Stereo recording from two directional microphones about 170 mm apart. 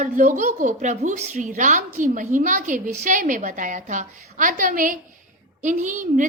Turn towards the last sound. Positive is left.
turn(degrees=-50)  # may be behind; listen again after turning